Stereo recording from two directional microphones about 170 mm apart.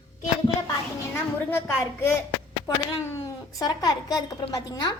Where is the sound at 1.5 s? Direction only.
15° left (ahead or behind).